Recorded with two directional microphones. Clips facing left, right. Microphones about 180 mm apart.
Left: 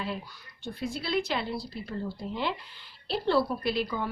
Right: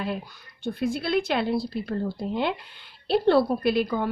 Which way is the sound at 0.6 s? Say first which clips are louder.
Right 7 dB; 55° right (ahead or behind).